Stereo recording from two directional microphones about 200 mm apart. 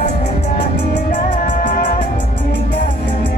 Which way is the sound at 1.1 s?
40° left (ahead or behind).